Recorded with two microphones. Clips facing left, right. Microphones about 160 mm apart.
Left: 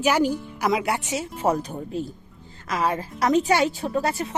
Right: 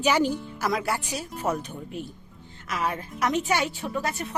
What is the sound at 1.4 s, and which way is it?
A woman's voice, 35° left (ahead or behind).